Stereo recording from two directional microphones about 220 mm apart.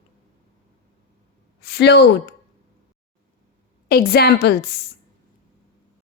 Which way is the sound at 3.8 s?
45° left (ahead or behind).